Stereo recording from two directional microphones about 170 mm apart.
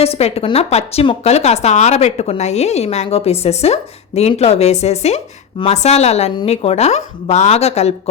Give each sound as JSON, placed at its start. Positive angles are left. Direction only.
{"t": 0.0, "sound": "a woman's voice", "side_deg": 35}